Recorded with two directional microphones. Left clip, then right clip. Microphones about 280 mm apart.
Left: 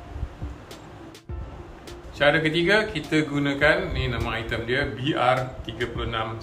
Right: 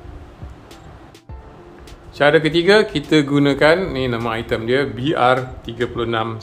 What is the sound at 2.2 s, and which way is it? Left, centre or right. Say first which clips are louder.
A man's voice: right 6 dB; right.